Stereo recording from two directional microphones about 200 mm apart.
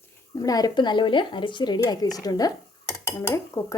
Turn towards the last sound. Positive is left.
turn(degrees=15)  # may be behind; listen again after turning